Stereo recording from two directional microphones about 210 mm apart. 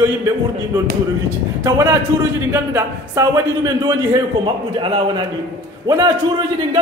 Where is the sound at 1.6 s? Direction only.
15° right (ahead or behind).